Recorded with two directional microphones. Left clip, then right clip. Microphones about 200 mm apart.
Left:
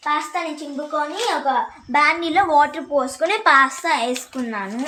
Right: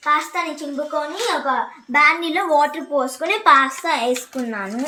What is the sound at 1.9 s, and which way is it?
A woman's voice, 15° left (ahead or behind).